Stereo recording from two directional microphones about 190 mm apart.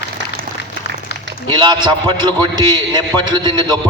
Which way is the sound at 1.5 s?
20° right (ahead or behind).